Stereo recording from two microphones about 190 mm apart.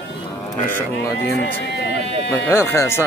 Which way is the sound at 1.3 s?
60° left (ahead or behind).